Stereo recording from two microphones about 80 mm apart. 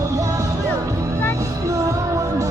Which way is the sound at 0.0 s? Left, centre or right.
Right.